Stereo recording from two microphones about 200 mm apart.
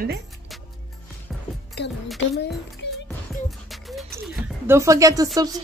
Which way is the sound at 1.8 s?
55° left (ahead or behind).